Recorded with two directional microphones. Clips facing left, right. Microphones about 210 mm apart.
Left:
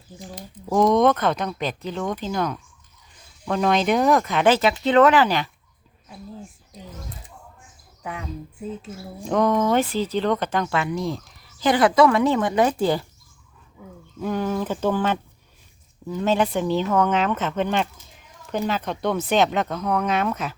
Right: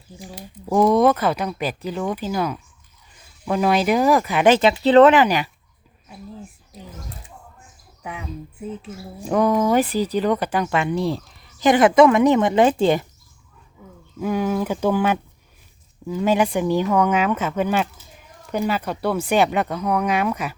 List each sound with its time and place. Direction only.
0.2 s speech: 10° right (ahead or behind)
4.6 s speech: 30° right (ahead or behind)
5.1 s speech: 15° right (ahead or behind)
8.0 s speech: 5° right (ahead or behind)
10.9 s speech: 30° right (ahead or behind)
11.6 s speech: 20° right (ahead or behind)
14.2 s speech: 10° right (ahead or behind)